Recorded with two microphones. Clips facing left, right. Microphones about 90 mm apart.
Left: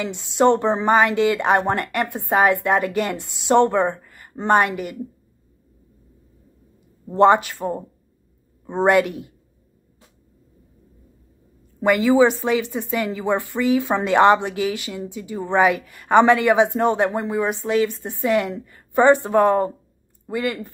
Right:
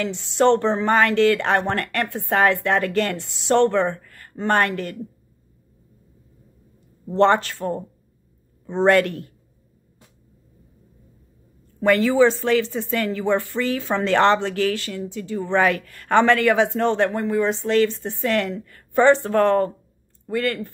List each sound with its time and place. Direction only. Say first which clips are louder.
0.2 s speech: left 1 dB; 15° left (ahead or behind)
7.1 s speech: left 2 dB; 10° left (ahead or behind)
11.8 s speech: left 1 dB; 15° left (ahead or behind)